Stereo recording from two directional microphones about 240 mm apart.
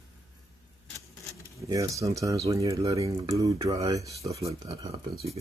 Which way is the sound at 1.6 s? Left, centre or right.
Centre.